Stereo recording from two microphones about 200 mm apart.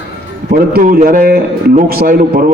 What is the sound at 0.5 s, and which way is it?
A man's voice, 45° right (ahead or behind).